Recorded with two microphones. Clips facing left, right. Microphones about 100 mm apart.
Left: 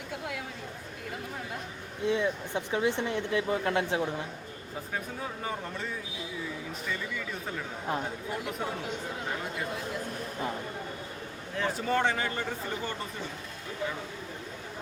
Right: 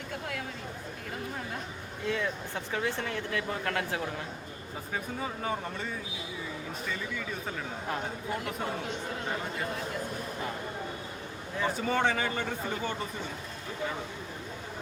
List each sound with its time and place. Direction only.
2.0 s speech: 20° left (ahead or behind)
5.2 s speech: centre (ahead or behind)
11.5 s speech: 5° right (ahead or behind)